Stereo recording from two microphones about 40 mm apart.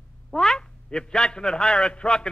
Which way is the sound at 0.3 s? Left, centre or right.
Centre.